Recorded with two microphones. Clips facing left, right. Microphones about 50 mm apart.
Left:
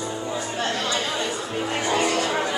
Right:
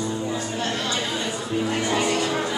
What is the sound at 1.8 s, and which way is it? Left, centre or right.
Music, left.